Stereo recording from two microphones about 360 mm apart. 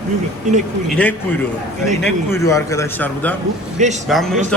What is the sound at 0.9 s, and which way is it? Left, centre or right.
A man's voice, centre.